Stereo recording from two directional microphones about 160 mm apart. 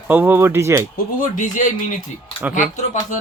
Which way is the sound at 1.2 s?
50° left (ahead or behind).